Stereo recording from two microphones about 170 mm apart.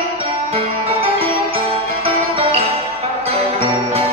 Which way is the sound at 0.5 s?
35° right (ahead or behind).